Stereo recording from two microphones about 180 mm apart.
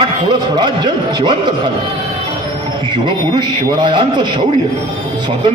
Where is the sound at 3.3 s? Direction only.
25° right (ahead or behind).